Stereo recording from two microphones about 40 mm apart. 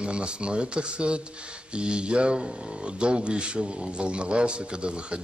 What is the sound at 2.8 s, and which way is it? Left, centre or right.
Speech, right.